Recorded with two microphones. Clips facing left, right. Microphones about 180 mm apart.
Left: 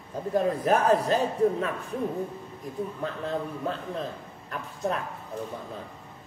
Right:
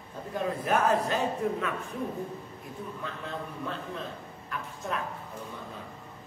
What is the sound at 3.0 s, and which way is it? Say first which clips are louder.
A man's voice: left 7 dB; 40° left (ahead or behind).